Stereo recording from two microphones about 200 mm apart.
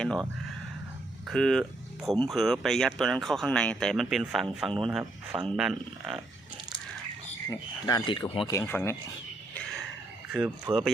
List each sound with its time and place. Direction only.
0.0 s speech: 5° left (ahead or behind)
1.3 s speech: centre (ahead or behind)
7.5 s speech: 20° left (ahead or behind)
10.3 s speech: 5° right (ahead or behind)